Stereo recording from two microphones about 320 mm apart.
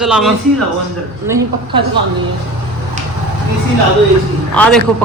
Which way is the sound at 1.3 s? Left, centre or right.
Centre.